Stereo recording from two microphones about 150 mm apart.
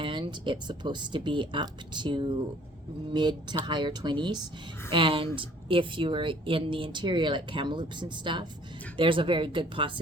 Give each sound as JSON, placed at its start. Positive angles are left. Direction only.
{"t": 0.0, "sound": "speech", "side_deg": -35}